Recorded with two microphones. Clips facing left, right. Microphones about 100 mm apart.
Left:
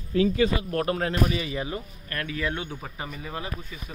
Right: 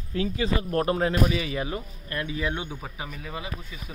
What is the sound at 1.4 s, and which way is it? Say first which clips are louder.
Speech: right 1 dB; 25° left (ahead or behind).